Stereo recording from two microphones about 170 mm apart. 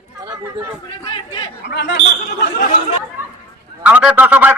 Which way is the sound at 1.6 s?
90° left.